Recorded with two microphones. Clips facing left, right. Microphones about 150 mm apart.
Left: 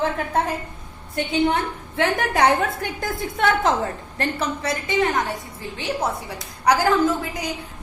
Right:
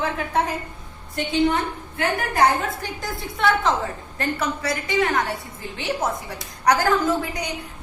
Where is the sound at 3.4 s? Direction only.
45° left (ahead or behind).